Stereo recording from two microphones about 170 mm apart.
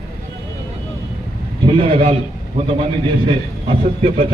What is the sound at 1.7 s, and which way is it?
Speech, 30° right (ahead or behind).